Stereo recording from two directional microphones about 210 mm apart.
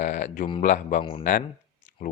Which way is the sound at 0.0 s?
35° left (ahead or behind).